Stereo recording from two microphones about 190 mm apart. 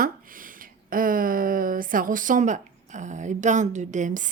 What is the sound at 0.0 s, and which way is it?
Speech, 45° right (ahead or behind).